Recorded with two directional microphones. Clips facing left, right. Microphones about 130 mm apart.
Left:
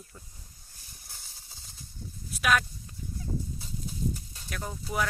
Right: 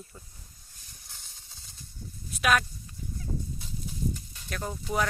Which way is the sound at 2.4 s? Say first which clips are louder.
Right 1 dB; centre (ahead or behind).